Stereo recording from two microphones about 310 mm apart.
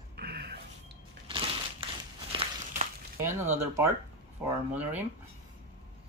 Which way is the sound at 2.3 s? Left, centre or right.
Right.